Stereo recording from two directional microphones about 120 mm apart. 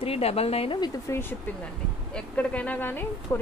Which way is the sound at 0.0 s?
55° left (ahead or behind).